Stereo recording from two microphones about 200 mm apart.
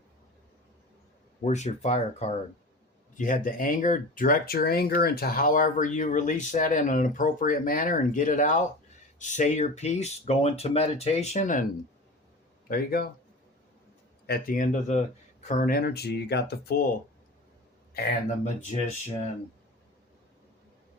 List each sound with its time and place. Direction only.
1.5 s speech: 35° left (ahead or behind)
12.6 s speech: 50° left (ahead or behind)
14.3 s speech: 50° left (ahead or behind)
17.9 s speech: 45° left (ahead or behind)